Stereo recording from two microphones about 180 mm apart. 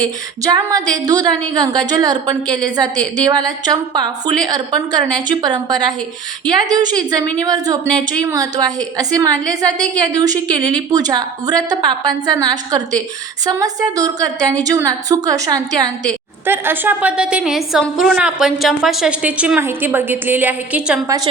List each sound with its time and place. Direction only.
0.0 s a woman's voice: 20° right (ahead or behind); by 21.0 s 5° right (ahead or behind)